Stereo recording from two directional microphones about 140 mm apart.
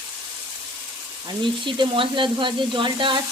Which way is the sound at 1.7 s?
35° right (ahead or behind).